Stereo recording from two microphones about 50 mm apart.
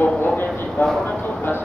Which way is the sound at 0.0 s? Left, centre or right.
Left.